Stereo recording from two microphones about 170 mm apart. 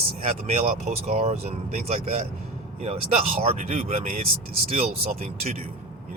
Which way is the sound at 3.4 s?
40° right (ahead or behind).